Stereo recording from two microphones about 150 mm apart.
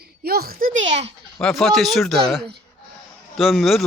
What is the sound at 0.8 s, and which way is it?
Speech, 45° right (ahead or behind).